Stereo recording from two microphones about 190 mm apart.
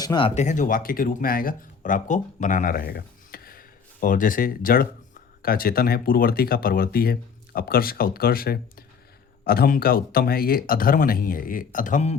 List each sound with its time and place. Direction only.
0.0 s speech: 25° left (ahead or behind); by 12.1 s 40° left (ahead or behind)